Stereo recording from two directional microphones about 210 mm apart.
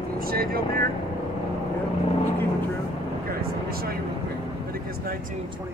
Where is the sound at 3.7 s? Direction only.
45° right (ahead or behind).